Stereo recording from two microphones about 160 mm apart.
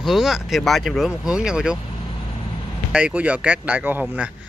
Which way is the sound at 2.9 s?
10° right (ahead or behind).